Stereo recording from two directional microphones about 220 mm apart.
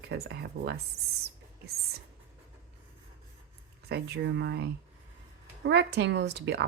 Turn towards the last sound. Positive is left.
turn(degrees=-50)  # may be behind; listen again after turning